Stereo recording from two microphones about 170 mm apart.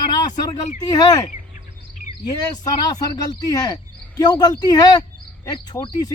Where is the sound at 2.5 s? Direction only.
25° left (ahead or behind).